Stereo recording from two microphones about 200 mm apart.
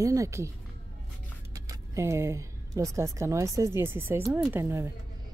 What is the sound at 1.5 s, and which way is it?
A woman's voice, 15° right (ahead or behind).